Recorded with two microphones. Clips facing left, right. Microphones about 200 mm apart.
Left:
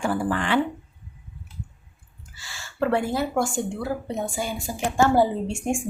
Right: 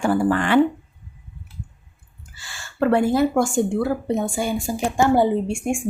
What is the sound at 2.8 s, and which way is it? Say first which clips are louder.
A woman's voice: right 6 dB; 50° right (ahead or behind).